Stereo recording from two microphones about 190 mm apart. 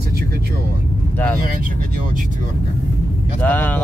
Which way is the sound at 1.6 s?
45° right (ahead or behind).